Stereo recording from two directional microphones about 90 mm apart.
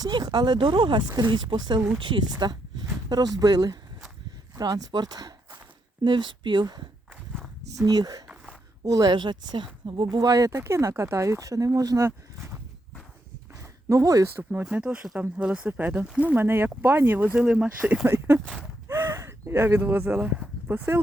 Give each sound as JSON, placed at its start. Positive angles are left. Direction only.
{"t": 0.0, "sound": "speech", "side_deg": -55}
{"t": 6.1, "sound": "speech", "side_deg": -60}
{"t": 7.8, "sound": "speech", "side_deg": -45}
{"t": 13.6, "sound": "a sound", "side_deg": -35}
{"t": 14.7, "sound": "speech", "side_deg": -15}
{"t": 18.0, "sound": "speech", "side_deg": -30}
{"t": 18.9, "sound": "gasp", "side_deg": -25}
{"t": 19.8, "sound": "speech", "side_deg": -25}